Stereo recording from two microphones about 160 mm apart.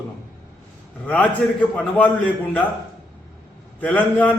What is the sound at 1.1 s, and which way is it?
A man's voice, 10° left (ahead or behind).